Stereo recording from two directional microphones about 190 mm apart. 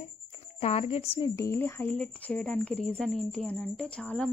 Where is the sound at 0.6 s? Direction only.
30° left (ahead or behind).